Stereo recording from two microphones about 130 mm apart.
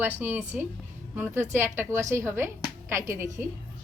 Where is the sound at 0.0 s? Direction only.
15° right (ahead or behind).